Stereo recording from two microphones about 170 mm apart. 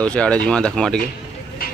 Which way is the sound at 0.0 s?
5° left (ahead or behind).